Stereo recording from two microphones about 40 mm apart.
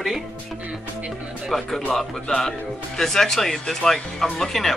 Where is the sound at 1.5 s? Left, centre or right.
Centre.